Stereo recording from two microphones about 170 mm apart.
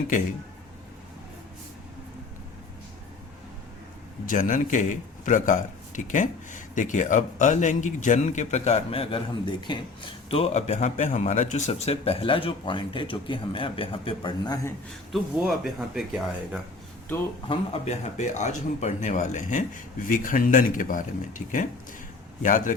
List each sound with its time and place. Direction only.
4.3 s speech: 50° left (ahead or behind); by 14.7 s 25° left (ahead or behind)
15.1 s speech: 5° right (ahead or behind)
17.5 s speech: 35° left (ahead or behind)